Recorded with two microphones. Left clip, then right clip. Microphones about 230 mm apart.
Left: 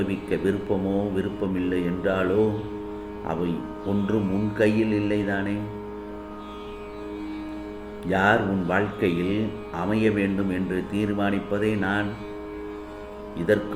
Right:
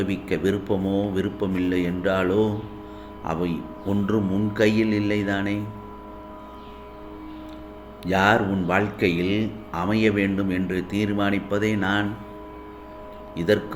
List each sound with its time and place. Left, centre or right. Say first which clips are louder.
0.0 s speech: right 1 dB; right
3.3 s speech: right 1 dB; right
8.0 s speech: right 1 dB; right
13.3 s speech: right 1 dB; right